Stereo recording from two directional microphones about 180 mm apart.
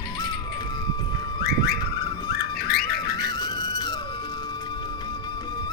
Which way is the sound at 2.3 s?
60° left (ahead or behind).